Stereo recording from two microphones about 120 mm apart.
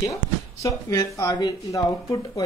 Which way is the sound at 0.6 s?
25° left (ahead or behind).